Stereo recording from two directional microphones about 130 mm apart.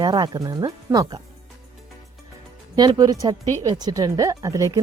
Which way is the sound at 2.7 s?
30° right (ahead or behind).